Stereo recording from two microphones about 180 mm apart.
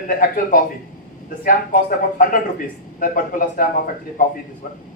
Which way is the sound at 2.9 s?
50° left (ahead or behind).